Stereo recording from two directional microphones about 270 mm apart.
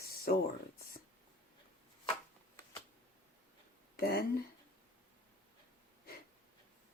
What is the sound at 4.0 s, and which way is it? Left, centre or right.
Speech, left.